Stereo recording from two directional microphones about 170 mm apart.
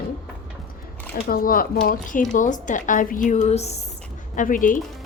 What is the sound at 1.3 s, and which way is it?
A woman's voice, 60° left (ahead or behind).